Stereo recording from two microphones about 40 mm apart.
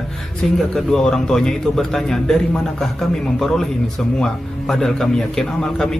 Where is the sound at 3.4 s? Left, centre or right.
Centre.